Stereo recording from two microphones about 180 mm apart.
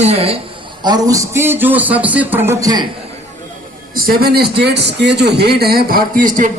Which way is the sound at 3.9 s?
55° right (ahead or behind).